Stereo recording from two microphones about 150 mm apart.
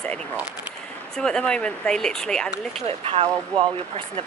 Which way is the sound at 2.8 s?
40° right (ahead or behind).